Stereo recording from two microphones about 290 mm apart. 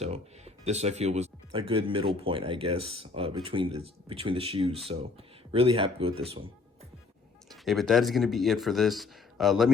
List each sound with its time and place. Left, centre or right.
0.0 s speech: right
7.5 s speech: centre